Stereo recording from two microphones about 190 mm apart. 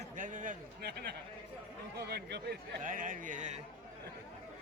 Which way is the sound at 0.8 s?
60° right (ahead or behind).